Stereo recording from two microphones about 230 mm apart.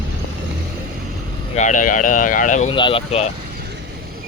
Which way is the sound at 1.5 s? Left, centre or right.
Left.